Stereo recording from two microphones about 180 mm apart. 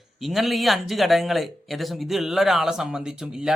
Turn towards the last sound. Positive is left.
turn(degrees=-5)  # may be behind; listen again after turning